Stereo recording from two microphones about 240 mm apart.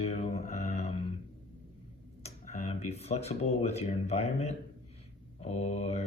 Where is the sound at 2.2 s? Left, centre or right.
Left.